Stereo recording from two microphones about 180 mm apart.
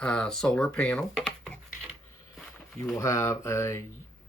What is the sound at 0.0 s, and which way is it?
Speech, 5° left (ahead or behind).